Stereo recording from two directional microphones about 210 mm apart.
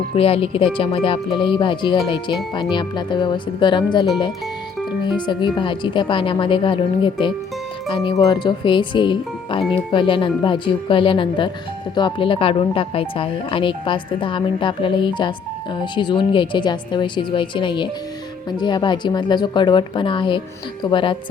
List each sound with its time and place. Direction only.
0.1 s speech: 25° left (ahead or behind)
5.1 s speech: 20° left (ahead or behind)